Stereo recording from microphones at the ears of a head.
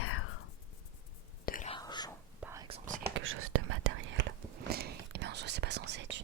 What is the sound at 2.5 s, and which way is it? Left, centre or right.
Whispering, right.